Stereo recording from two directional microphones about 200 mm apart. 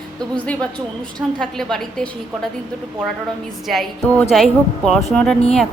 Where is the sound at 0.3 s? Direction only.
5° left (ahead or behind).